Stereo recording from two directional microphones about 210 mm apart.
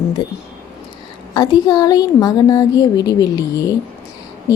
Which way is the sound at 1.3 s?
20° left (ahead or behind).